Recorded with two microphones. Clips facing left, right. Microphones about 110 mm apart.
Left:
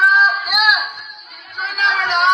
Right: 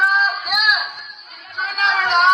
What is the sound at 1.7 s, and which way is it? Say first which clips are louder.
Music: right 1 dB; centre (ahead or behind).